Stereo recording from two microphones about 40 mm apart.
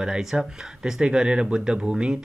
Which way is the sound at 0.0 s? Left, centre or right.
Centre.